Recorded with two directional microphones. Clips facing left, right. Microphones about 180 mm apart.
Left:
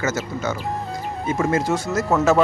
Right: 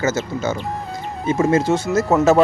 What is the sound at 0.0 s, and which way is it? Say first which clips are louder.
Speech: right 3 dB; 25° right (ahead or behind).